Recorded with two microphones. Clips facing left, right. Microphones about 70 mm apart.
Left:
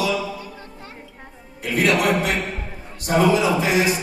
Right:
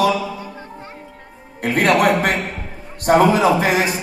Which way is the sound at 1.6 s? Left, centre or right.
Right.